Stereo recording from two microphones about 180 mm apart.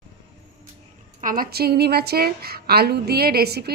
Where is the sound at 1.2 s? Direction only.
50° right (ahead or behind).